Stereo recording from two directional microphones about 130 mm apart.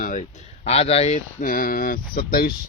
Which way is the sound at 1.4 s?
90° left.